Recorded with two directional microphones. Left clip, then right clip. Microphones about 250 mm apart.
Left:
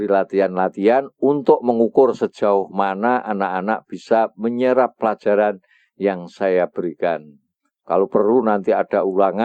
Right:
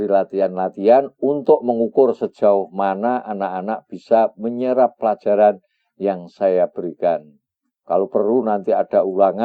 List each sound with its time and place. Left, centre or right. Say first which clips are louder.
0.0 s speech: even; left